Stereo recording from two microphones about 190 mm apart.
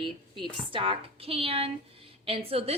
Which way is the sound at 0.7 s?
25° right (ahead or behind).